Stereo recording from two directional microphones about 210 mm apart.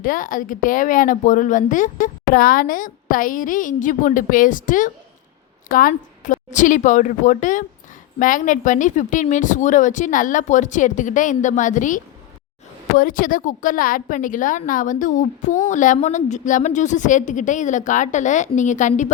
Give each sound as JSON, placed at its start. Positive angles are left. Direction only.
{"t": 0.0, "sound": "a woman's voice", "side_deg": 40}